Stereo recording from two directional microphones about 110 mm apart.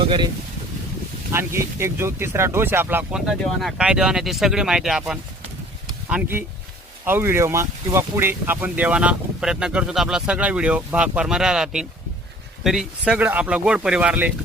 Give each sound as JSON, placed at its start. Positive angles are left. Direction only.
{"t": 1.3, "sound": "speech", "side_deg": -25}
{"t": 3.1, "sound": "speech", "side_deg": -5}
{"t": 7.0, "sound": "speech", "side_deg": -20}